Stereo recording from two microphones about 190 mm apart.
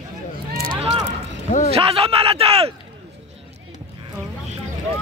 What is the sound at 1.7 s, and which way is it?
Speech, 30° right (ahead or behind).